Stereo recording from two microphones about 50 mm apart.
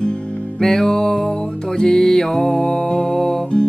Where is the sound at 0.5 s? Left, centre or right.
Centre.